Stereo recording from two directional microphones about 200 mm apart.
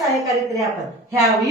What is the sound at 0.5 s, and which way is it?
Speech, 15° right (ahead or behind).